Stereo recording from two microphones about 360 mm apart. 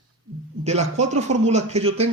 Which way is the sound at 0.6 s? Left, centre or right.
Centre.